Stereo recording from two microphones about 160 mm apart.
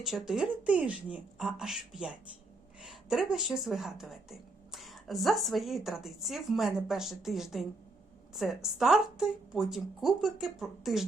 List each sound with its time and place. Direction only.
0.0 s speech: centre (ahead or behind)